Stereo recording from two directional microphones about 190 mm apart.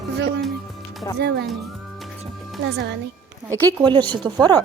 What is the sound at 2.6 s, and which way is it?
Speech, 65° right (ahead or behind).